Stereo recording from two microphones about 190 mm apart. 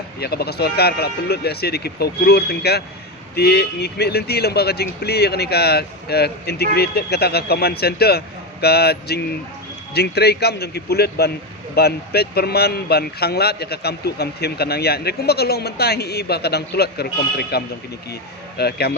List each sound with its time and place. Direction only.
0.2 s speech: 55° left (ahead or behind)